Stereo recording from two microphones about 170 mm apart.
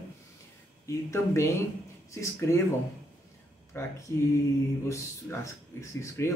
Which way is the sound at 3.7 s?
15° left (ahead or behind).